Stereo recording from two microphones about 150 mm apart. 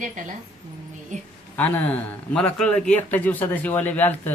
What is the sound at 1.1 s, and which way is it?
Speech, 55° right (ahead or behind).